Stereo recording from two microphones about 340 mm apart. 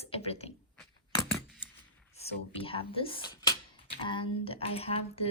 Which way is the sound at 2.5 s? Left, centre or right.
Centre.